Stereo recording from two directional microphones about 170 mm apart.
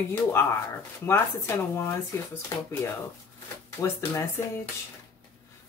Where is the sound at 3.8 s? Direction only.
15° left (ahead or behind).